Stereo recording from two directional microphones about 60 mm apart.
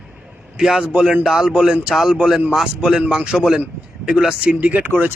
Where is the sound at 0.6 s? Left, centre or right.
Centre.